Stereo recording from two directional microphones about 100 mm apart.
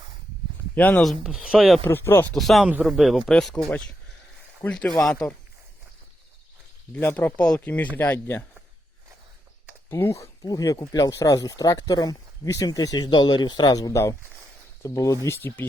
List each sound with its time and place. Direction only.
0.8 s speech: 15° left (ahead or behind)
1.2 s speech: 5° right (ahead or behind)
1.8 s speech: 25° left (ahead or behind)
2.3 s speech: centre (ahead or behind)
7.0 s speech: 20° left (ahead or behind)
9.9 s speech: 30° left (ahead or behind)